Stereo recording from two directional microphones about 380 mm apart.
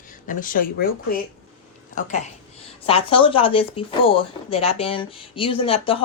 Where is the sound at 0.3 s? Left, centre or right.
Left.